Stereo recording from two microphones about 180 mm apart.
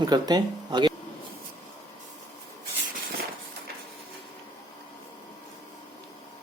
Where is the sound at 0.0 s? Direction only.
20° right (ahead or behind).